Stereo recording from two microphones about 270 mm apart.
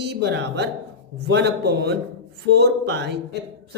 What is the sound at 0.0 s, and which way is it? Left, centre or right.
A man's voice, right.